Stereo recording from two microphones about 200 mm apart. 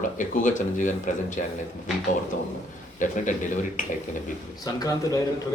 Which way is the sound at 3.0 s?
40° left (ahead or behind).